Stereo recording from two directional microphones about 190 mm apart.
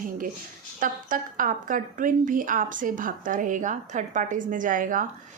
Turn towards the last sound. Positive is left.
turn(degrees=-45)  # may be behind; listen again after turning